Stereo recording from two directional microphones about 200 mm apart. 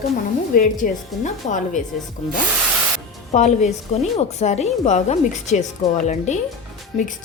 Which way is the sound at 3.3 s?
35° left (ahead or behind).